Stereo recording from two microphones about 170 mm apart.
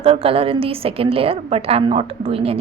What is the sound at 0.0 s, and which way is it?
A woman's voice, 35° right (ahead or behind).